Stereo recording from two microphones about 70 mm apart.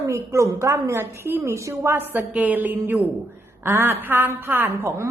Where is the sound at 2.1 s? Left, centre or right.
Right.